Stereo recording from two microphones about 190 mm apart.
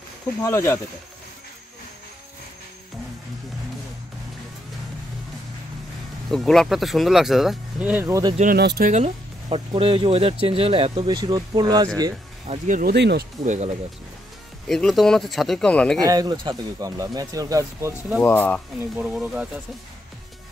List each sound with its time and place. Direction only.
0.4 s speech: 15° left (ahead or behind)
6.3 s speech: centre (ahead or behind); by 8.4 s 20° right (ahead or behind)
8.4 s speech: 55° right (ahead or behind)
8.9 s speech: 30° right (ahead or behind)
12.4 s speech: 40° right (ahead or behind)
12.9 s speech: 60° right (ahead or behind)
13.5 s speech: 35° right (ahead or behind)
14.7 s speech: centre (ahead or behind)
16.0 s speech: 20° right (ahead or behind)
18.2 s speech: 10° left (ahead or behind)
18.9 s speech: 5° right (ahead or behind)